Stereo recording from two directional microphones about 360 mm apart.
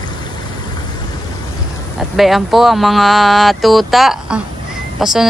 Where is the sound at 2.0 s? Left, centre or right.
Centre.